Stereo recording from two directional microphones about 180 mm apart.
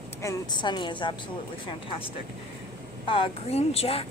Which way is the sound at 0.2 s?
20° left (ahead or behind).